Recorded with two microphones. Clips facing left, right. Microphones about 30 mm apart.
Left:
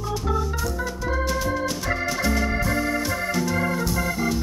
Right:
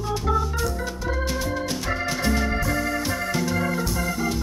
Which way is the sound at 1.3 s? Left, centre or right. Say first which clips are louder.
Left 2 dB; centre.